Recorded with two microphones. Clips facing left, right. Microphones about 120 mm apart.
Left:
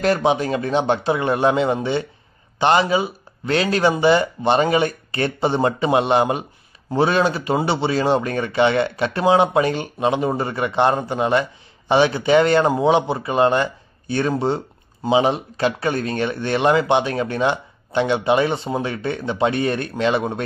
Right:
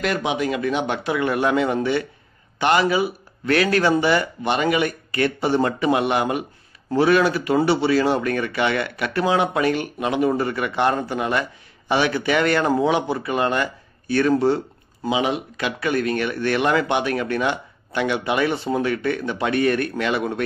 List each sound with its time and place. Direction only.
0.0 s speech: 35° left (ahead or behind)
15.0 s speech: 35° left (ahead or behind)